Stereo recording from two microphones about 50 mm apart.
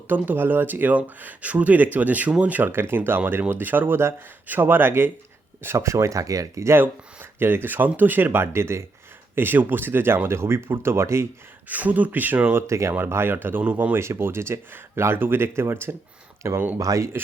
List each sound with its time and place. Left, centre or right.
0.1 s speech: right
2.6 s speech: right
5.7 s speech: right
6.7 s speech: right
8.5 s speech: right
9.3 s speech: right
10.2 s speech: right
11.7 s speech: right
12.5 s speech: right
13.2 s speech: right
13.9 s speech: right
16.7 s speech: right